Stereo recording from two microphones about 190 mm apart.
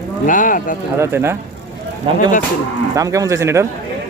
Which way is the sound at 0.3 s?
45° left (ahead or behind).